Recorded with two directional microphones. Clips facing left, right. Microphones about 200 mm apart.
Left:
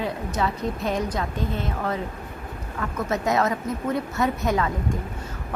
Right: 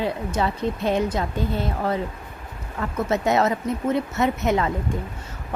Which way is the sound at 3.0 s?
25° right (ahead or behind).